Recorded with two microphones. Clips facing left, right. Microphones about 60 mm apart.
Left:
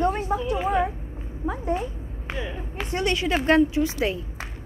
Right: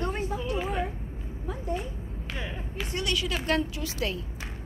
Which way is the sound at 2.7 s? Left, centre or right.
Left.